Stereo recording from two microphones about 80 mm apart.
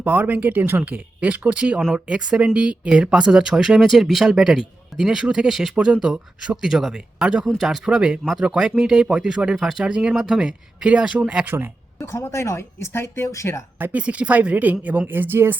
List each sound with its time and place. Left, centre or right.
0.0 s speech: right
11.9 s a woman's voice: left
13.7 s speech: right